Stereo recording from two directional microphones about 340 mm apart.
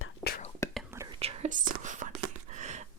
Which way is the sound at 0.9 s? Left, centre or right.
Centre.